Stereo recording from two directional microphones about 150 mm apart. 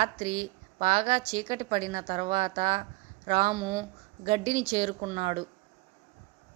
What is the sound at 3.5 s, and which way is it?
Speech, 25° right (ahead or behind).